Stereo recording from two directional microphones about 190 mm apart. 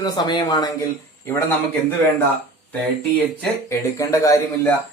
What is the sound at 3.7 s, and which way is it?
Speech, 15° left (ahead or behind).